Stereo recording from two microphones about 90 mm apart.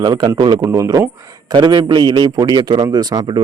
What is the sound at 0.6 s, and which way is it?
Speech, 30° right (ahead or behind).